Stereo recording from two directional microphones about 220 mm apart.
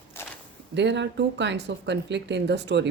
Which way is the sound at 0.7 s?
50° right (ahead or behind).